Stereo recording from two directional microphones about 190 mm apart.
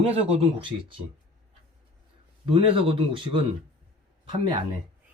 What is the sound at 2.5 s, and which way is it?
Speech, 30° right (ahead or behind).